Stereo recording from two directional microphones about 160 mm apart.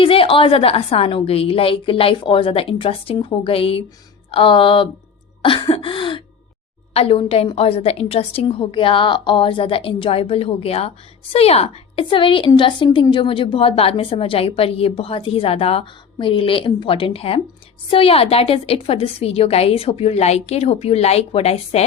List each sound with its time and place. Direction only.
0.0 s a woman's voice: 35° left (ahead or behind)
5.4 s a sound: 30° left (ahead or behind)
6.9 s a woman's voice: 35° left (ahead or behind)